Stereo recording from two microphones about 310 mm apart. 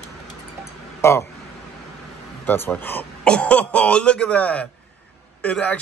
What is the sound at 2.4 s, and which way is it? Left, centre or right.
Speech, centre.